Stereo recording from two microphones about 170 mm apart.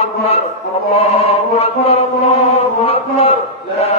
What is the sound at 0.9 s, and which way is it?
Chant, 35° left (ahead or behind).